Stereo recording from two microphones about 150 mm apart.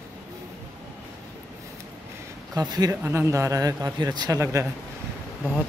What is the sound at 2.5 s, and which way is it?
Speech, 25° right (ahead or behind).